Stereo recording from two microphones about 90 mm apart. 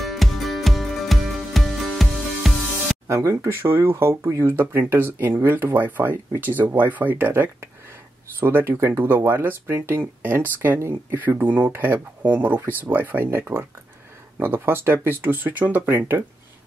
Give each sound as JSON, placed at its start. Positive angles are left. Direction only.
{"t": 0.0, "sound": "music", "side_deg": 0}
{"t": 3.1, "sound": "speech", "side_deg": -30}